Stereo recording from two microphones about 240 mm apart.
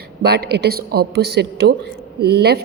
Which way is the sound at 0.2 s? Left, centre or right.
Right.